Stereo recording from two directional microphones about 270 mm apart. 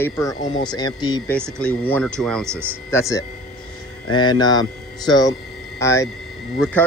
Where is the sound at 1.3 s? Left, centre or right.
Centre.